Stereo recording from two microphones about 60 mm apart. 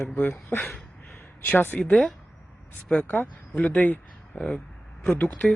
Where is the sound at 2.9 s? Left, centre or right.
Left.